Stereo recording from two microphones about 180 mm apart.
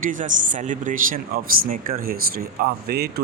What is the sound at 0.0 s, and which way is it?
Speech, 45° right (ahead or behind).